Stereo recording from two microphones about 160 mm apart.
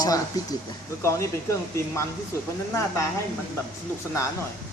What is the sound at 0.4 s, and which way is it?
Speech, 25° left (ahead or behind).